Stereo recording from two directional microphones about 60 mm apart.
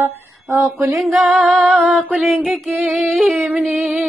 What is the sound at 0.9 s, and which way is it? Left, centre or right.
Female singing, centre.